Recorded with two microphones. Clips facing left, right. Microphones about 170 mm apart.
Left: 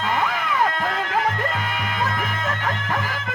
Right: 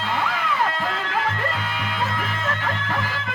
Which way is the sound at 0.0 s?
45° left (ahead or behind).